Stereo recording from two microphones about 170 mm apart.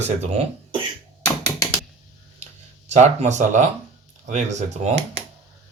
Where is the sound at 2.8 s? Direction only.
40° right (ahead or behind).